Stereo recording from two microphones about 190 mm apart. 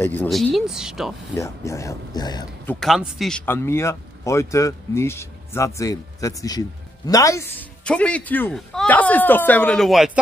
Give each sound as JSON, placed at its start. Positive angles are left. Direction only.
{"t": 0.0, "sound": "speech", "side_deg": 10}
{"t": 1.3, "sound": "a man's voice", "side_deg": 15}
{"t": 2.6, "sound": "a man's voice", "side_deg": 5}